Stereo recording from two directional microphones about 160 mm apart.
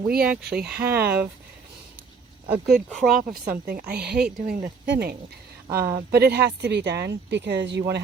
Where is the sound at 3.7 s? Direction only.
75° right (ahead or behind); by 5.1 s 90° right.